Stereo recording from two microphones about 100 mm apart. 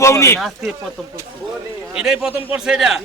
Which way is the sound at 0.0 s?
30° left (ahead or behind).